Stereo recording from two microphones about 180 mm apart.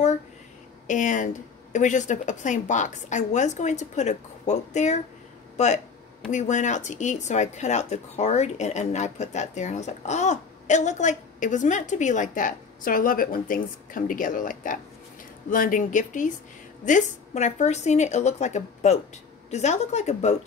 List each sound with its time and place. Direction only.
0.8 s a woman's voice: 45° left (ahead or behind)
6.3 s a woman's voice: 40° left (ahead or behind)